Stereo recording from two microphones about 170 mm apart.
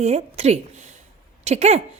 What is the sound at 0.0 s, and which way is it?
A woman's voice, 40° right (ahead or behind).